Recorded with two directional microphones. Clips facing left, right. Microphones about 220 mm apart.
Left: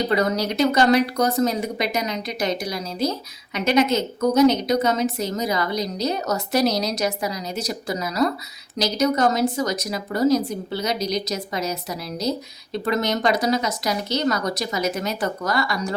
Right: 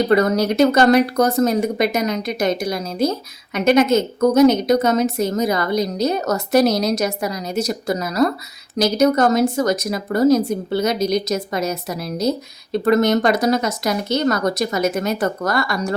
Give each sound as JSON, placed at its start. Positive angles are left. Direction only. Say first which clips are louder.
{"t": 0.1, "sound": "speech", "louder": "right 6 dB", "side_deg": -50}